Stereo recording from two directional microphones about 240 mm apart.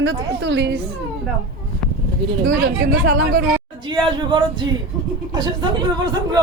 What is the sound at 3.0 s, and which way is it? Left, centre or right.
Speech, right.